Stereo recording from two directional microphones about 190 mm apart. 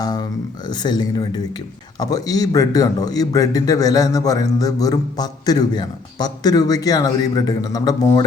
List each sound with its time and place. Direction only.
0.0 s a man's voice: 20° left (ahead or behind)